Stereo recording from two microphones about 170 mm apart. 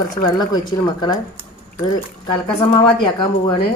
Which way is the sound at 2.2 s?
30° left (ahead or behind).